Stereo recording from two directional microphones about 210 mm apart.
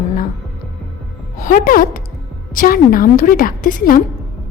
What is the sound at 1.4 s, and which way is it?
Speech, 40° left (ahead or behind).